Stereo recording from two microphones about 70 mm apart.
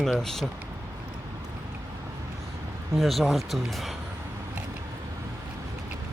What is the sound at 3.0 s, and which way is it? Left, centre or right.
Speech, centre.